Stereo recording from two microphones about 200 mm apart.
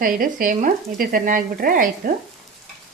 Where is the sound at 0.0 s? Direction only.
45° right (ahead or behind).